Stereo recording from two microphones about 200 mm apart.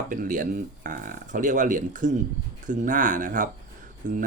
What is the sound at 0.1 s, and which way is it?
Speech, 45° right (ahead or behind).